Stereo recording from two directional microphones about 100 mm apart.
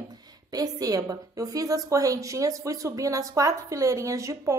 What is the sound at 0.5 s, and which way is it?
A woman's voice, 40° right (ahead or behind).